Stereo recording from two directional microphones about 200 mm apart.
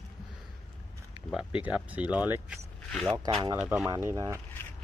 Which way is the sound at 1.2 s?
5° right (ahead or behind).